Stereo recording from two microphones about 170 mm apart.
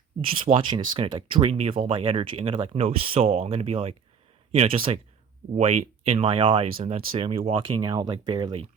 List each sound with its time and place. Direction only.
0.2 s speech: 30° right (ahead or behind)